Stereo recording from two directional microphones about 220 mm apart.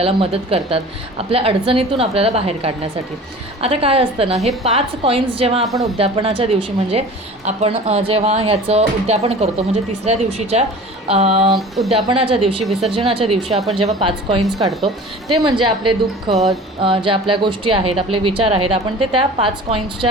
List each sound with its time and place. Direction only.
0.0 s speech: 25° right (ahead or behind)
5.6 s a woman's voice: centre (ahead or behind)
6.0 s speech: 25° right (ahead or behind)
14.6 s a woman's voice: centre (ahead or behind)
15.8 s speech: 20° right (ahead or behind)
16.3 s a woman's voice: centre (ahead or behind)
16.8 s speech: 25° right (ahead or behind)